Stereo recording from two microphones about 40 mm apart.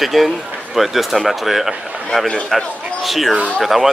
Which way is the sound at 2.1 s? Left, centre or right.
Centre.